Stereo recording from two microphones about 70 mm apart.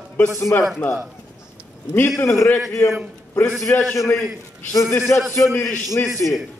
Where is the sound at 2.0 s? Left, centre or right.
Left.